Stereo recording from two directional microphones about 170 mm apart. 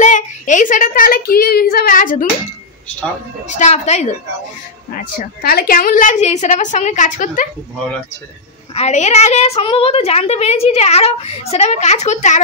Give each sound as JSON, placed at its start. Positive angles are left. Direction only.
{"t": 0.0, "sound": "a child's voice", "side_deg": 45}
{"t": 3.4, "sound": "a woman's voice", "side_deg": 45}
{"t": 4.9, "sound": "a woman's voice", "side_deg": 65}
{"t": 8.7, "sound": "a woman's voice", "side_deg": 40}